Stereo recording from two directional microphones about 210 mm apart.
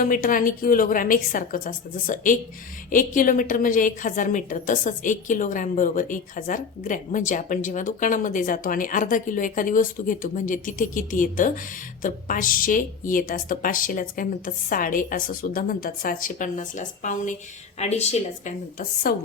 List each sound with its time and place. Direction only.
0.0 s a woman's voice: 40° left (ahead or behind)